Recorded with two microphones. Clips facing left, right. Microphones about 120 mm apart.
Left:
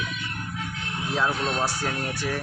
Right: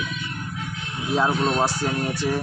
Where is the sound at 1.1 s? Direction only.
25° right (ahead or behind).